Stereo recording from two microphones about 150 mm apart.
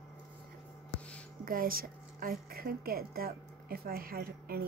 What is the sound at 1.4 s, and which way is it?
A woman's voice, 75° right (ahead or behind).